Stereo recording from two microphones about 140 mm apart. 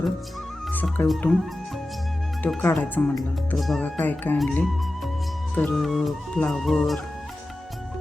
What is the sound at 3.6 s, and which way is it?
Speech, centre (ahead or behind).